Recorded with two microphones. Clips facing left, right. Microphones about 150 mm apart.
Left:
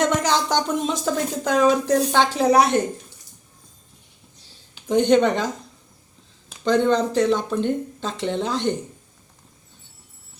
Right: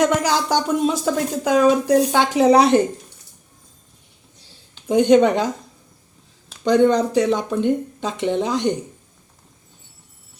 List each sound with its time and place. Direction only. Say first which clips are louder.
0.0 s speech: right 2 dB; 10° right (ahead or behind)
4.9 s speech: right 3 dB; 10° right (ahead or behind)
6.7 s speech: right 3 dB; 10° right (ahead or behind)